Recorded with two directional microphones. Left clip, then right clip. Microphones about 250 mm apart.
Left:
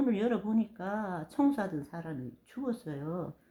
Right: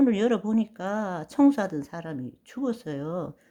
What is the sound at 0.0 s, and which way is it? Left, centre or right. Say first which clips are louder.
Speech: right 7 dB; right.